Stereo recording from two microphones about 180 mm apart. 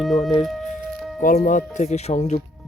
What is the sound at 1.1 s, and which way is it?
Speech, 50° left (ahead or behind).